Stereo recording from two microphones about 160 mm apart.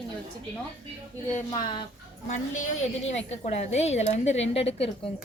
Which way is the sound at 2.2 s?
45° left (ahead or behind).